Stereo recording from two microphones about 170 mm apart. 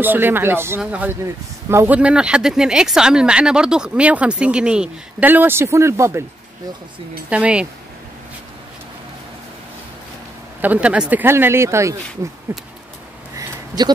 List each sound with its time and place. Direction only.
0.0 s speech: 10° right (ahead or behind)
7.2 s speech: 5° right (ahead or behind)
10.6 s speech: 10° right (ahead or behind)
13.4 s a sound: 25° right (ahead or behind)